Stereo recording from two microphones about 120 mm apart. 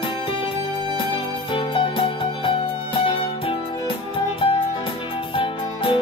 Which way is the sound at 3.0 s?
45° left (ahead or behind).